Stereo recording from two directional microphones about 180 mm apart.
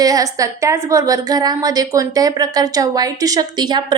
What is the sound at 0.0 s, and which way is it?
A woman's voice, 20° right (ahead or behind).